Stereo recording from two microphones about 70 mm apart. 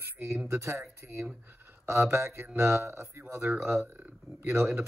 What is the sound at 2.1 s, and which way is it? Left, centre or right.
Speech, right.